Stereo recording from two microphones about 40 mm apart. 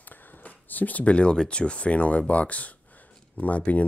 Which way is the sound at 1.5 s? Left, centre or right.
Left.